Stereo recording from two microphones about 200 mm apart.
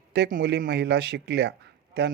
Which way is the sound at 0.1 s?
50° right (ahead or behind).